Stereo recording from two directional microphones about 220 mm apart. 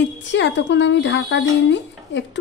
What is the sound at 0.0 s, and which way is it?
Speech, 55° left (ahead or behind).